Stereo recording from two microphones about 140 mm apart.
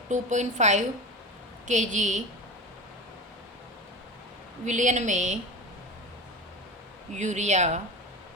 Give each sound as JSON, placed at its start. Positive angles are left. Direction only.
{"t": 0.1, "sound": "a woman's voice", "side_deg": -60}
{"t": 4.6, "sound": "a woman's voice", "side_deg": -60}
{"t": 7.2, "sound": "a woman's voice", "side_deg": -60}